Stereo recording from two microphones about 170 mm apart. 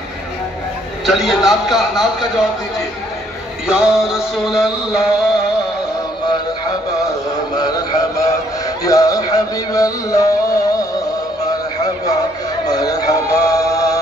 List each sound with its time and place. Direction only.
1.0 s music: centre (ahead or behind)
3.6 s music: 5° right (ahead or behind)
7.1 s music: 20° left (ahead or behind)